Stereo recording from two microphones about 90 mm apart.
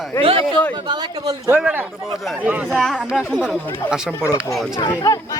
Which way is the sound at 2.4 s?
20° right (ahead or behind).